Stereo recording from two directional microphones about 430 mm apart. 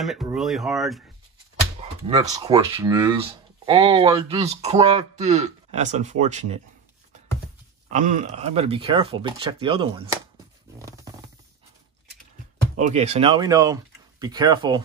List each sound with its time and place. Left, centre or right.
0.0 s speech: centre
1.8 s speech: centre
7.9 s speech: centre
10.8 s stomach rumble: centre
12.7 s speech: centre